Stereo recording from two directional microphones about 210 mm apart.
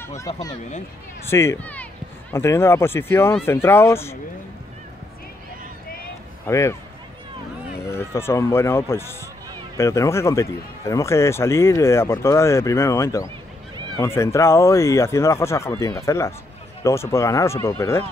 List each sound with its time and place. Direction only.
1.3 s speech: 10° left (ahead or behind)
6.4 s speech: 15° left (ahead or behind)
7.9 s speech: 10° left (ahead or behind)